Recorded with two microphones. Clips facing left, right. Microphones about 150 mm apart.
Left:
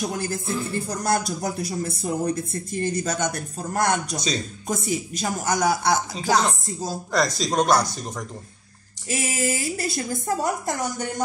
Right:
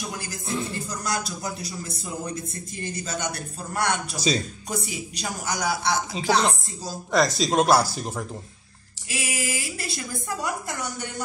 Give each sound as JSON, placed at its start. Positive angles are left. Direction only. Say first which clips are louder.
{"t": 0.0, "sound": "speech", "louder": "left 7 dB", "side_deg": 50}
{"t": 7.1, "sound": "speech", "louder": "right 2 dB", "side_deg": 0}
{"t": 9.1, "sound": "a woman's voice", "louder": "left 5 dB", "side_deg": 45}